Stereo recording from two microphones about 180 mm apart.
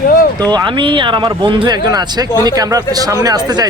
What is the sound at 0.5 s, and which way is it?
Speech, 25° right (ahead or behind).